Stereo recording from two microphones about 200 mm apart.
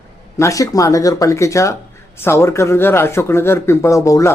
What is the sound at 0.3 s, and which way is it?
Speech, 15° left (ahead or behind).